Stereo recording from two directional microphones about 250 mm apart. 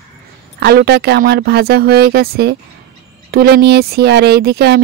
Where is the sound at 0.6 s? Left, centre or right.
Right.